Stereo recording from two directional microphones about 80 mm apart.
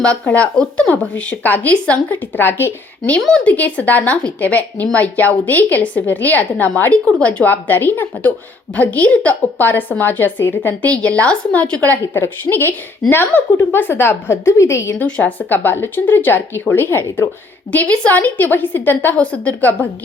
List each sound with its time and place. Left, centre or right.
0.0 s speech: centre
3.2 s speech: centre
3.4 s speech: centre; by 14.9 s left
14.9 s speech: centre